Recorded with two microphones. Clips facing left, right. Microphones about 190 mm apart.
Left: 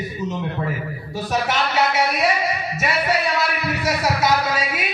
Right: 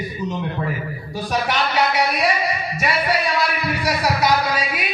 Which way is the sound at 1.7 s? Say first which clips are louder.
Even; 25° left (ahead or behind).